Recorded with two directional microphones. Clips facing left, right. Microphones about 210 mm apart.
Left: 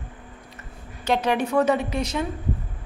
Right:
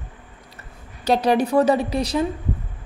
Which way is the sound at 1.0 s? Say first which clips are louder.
Right 4 dB; 35° right (ahead or behind).